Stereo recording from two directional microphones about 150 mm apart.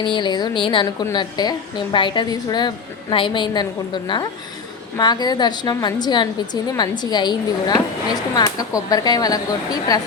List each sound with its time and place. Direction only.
0.0 s a woman's voice: 30° left (ahead or behind)